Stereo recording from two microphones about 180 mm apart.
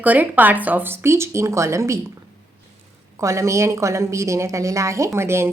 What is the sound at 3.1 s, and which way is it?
A woman's voice, 15° right (ahead or behind).